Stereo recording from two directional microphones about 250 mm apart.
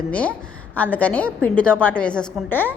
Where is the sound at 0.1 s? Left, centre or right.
Centre.